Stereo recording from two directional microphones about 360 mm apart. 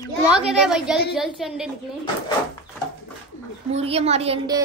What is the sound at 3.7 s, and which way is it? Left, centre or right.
Speech, centre.